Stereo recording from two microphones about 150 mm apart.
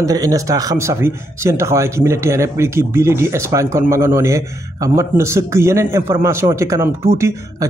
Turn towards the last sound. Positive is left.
turn(degrees=-20)  # may be behind; listen again after turning